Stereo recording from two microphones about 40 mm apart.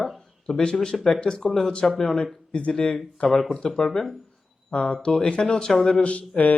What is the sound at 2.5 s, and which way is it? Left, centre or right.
Speech, left.